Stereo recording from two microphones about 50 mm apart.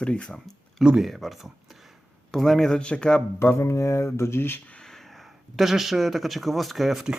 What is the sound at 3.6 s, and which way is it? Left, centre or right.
Speech, left.